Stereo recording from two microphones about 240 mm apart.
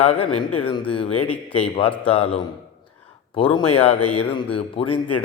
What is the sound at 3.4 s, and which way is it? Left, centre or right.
Speech, left.